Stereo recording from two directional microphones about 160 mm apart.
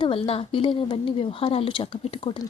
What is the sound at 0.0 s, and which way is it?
Speech, 35° left (ahead or behind).